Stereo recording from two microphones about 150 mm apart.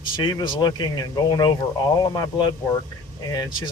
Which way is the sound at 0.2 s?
30° left (ahead or behind).